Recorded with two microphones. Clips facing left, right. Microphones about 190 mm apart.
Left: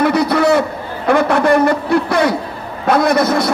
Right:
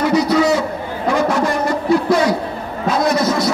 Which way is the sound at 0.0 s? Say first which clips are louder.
Left 1 dB; 60° left (ahead or behind).